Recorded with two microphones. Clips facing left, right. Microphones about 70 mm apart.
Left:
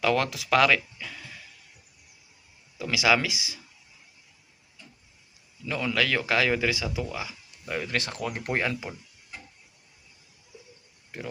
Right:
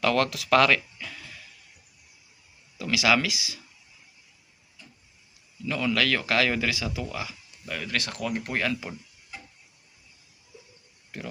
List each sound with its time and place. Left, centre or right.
0.0 s speech: centre
2.7 s speech: left
5.6 s speech: centre